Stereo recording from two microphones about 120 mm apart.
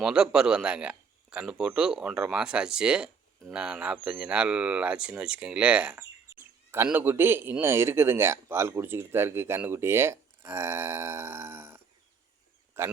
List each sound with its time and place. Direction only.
0.0 s speech: 5° right (ahead or behind)
6.0 s a sound: 20° right (ahead or behind)
6.8 s speech: 15° right (ahead or behind)